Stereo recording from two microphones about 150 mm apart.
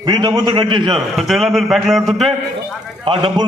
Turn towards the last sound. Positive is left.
turn(degrees=-35)  # may be behind; listen again after turning